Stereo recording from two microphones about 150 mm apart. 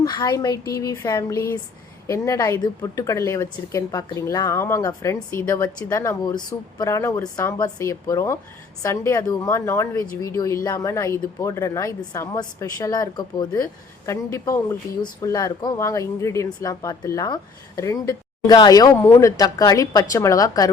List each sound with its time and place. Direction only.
0.0 s speech: 30° left (ahead or behind)